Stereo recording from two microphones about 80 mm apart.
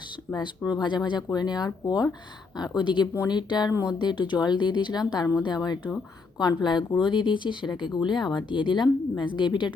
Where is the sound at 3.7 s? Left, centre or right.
Left.